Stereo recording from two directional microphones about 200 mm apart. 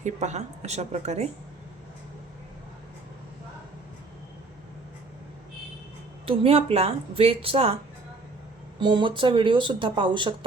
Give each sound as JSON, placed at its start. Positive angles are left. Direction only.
{"t": 0.0, "sound": "a woman's voice", "side_deg": -35}
{"t": 6.2, "sound": "speech", "side_deg": -30}
{"t": 8.8, "sound": "speech", "side_deg": -25}